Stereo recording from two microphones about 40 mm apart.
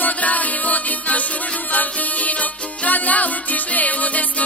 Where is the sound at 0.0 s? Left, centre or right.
Left.